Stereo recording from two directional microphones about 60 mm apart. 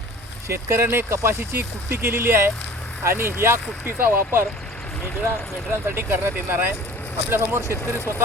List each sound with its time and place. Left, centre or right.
0.4 s speech: right
5.7 s speech: right
7.6 s speech: right